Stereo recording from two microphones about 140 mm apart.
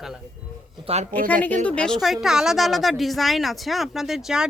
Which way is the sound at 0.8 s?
50° right (ahead or behind).